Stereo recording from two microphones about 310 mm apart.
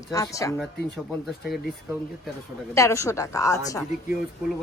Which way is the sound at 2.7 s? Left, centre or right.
Centre.